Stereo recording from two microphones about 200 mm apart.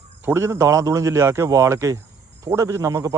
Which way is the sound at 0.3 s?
15° right (ahead or behind).